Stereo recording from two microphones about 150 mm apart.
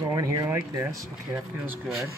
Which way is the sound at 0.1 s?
25° right (ahead or behind).